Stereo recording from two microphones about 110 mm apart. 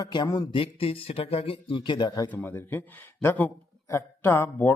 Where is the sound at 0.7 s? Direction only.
60° left (ahead or behind).